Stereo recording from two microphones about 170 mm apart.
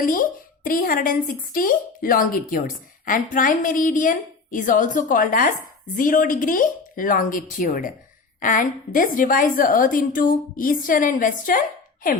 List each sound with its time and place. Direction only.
0.0 s a woman's voice: 55° left (ahead or behind)